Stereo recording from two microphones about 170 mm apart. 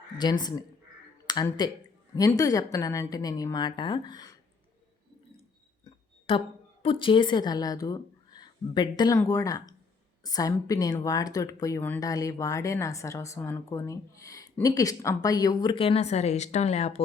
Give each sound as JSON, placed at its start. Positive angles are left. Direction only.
{"t": 0.2, "sound": "speech", "side_deg": 25}
{"t": 5.8, "sound": "a sound", "side_deg": 30}
{"t": 6.8, "sound": "speech", "side_deg": 30}